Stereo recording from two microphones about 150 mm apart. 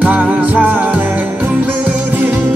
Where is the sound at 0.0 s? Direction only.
10° right (ahead or behind).